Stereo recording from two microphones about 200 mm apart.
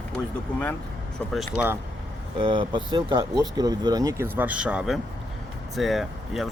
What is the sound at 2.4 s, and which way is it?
Speech, 25° right (ahead or behind).